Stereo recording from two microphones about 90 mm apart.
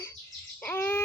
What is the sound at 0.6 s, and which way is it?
Bird, 20° left (ahead or behind).